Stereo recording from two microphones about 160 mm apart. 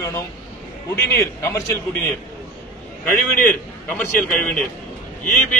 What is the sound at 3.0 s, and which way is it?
A man's voice, 10° left (ahead or behind).